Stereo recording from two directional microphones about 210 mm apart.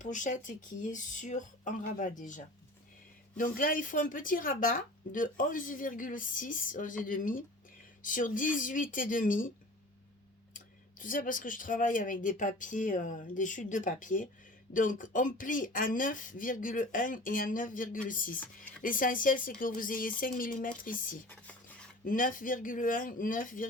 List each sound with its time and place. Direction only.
0.0 s speech: 35° left (ahead or behind)
11.0 s speech: 40° left (ahead or behind)